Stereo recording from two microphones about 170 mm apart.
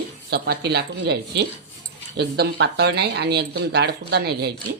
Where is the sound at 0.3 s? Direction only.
75° right (ahead or behind).